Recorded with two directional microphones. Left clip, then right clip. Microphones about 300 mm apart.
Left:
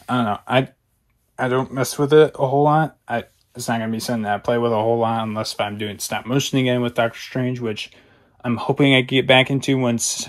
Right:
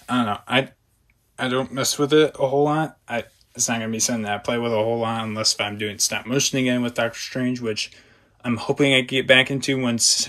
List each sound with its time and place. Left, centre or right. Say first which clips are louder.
0.0 s speech: left 2 dB; centre
7.9 s a sound: even; centre
8.7 s speech: left 2 dB; centre